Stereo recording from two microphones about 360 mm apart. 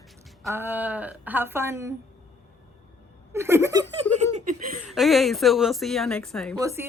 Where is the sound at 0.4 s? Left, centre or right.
Centre.